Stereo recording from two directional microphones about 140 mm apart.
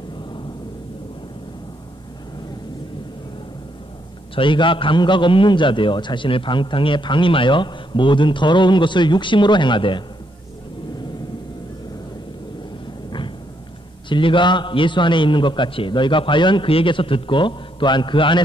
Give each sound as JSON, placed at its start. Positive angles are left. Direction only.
{"t": 4.4, "sound": "a man's voice", "side_deg": 35}
{"t": 14.0, "sound": "a man's voice", "side_deg": 35}